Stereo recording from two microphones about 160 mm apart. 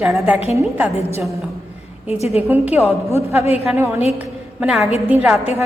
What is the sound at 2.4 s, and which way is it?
Speech, 10° right (ahead or behind).